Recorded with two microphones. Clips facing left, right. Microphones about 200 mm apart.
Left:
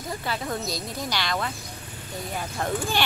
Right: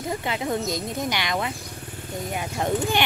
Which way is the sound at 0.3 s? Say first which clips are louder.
Right 3 dB; 20° right (ahead or behind).